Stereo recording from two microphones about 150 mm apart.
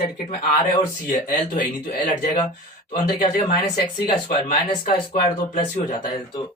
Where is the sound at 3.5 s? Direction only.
65° left (ahead or behind).